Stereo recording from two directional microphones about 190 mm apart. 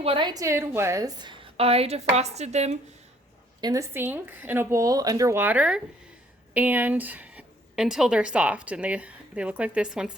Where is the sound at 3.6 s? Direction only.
15° right (ahead or behind).